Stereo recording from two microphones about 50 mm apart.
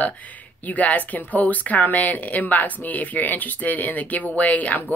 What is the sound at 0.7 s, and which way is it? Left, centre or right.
Speech, left.